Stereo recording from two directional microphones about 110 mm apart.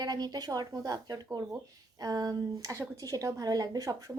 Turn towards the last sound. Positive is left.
turn(degrees=-30)  # may be behind; listen again after turning